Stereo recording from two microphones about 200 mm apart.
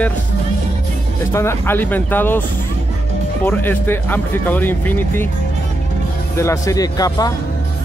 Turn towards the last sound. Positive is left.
turn(degrees=20)  # may be behind; listen again after turning